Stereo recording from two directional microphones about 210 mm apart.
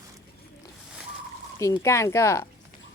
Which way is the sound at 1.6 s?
15° left (ahead or behind).